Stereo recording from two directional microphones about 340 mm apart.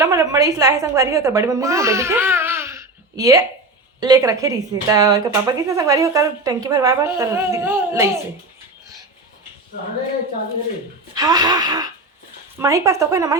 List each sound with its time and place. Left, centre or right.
0.0 s a woman's voice: centre
11.1 s speech: centre